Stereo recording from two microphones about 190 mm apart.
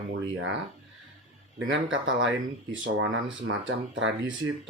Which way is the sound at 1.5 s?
80° right.